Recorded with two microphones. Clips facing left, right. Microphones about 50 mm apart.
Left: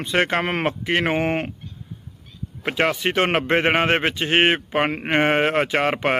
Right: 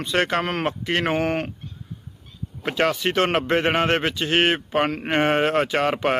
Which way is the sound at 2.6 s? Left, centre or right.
Centre.